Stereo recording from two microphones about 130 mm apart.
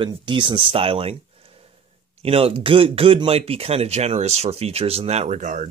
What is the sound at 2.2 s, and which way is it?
Speech, 45° right (ahead or behind).